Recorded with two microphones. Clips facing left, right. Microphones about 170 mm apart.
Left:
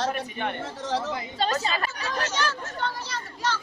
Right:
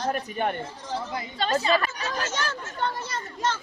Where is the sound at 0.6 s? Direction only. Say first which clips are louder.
Left 4 dB; 85° left.